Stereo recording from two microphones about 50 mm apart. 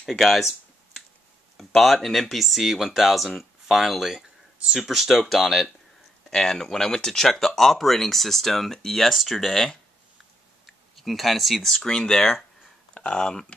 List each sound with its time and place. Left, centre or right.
0.0 s speech: centre
1.6 s speech: centre
6.3 s speech: centre
11.0 s speech: centre
11.7 s speech: centre